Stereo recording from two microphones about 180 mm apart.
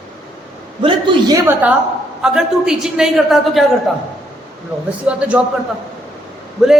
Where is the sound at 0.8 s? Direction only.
25° right (ahead or behind).